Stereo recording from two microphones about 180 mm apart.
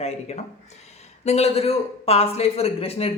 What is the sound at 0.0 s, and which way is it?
Speech, 35° left (ahead or behind).